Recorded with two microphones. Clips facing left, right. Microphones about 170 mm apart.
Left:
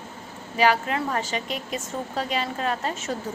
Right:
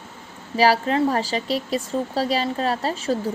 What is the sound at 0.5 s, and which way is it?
A woman's voice, 35° right (ahead or behind).